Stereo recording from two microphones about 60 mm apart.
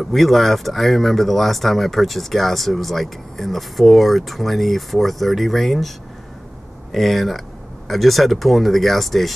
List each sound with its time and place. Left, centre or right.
0.0 s speech: centre
6.9 s speech: centre